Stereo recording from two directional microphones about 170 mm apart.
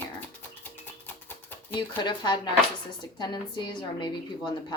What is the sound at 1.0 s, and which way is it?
Typewriter, 10° left (ahead or behind).